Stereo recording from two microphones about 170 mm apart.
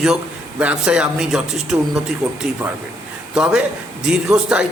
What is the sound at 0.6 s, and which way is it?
A man's voice, 5° right (ahead or behind).